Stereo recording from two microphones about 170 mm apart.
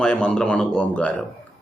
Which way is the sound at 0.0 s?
5° left (ahead or behind).